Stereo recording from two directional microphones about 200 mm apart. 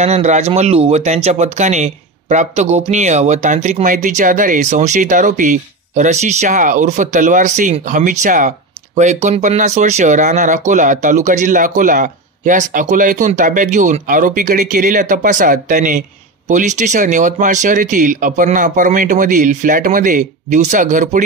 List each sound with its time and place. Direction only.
0.0 s speech: 35° right (ahead or behind)